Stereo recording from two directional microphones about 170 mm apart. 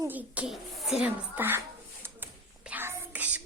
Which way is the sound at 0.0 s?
10° right (ahead or behind).